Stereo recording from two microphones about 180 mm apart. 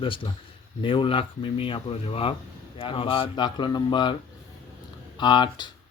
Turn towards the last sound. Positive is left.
turn(degrees=25)  # may be behind; listen again after turning